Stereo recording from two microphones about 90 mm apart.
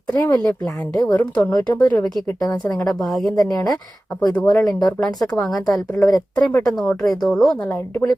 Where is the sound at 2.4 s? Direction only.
45° left (ahead or behind).